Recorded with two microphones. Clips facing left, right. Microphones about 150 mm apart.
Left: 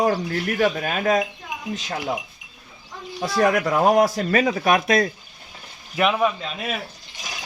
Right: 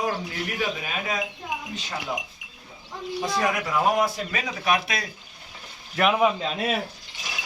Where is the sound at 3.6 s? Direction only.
55° left (ahead or behind).